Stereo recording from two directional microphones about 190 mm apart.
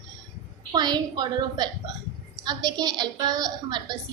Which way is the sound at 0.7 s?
20° right (ahead or behind).